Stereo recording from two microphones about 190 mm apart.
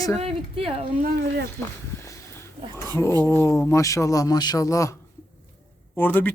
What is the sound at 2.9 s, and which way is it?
Speech, 15° left (ahead or behind).